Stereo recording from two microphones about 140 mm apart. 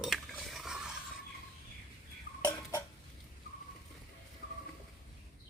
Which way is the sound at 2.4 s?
25° left (ahead or behind).